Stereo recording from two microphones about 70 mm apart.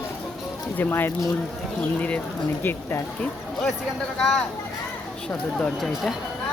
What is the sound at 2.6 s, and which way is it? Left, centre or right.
Speech, left.